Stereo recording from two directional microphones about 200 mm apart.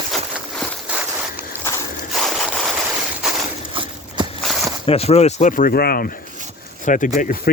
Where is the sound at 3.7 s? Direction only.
25° right (ahead or behind).